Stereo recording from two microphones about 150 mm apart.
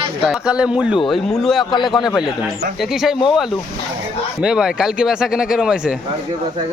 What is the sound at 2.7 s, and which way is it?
Speech, centre (ahead or behind).